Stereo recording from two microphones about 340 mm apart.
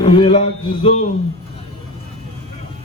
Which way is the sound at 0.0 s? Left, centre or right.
Centre.